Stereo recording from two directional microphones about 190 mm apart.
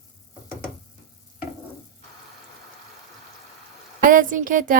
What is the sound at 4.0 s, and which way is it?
Speech, 45° right (ahead or behind).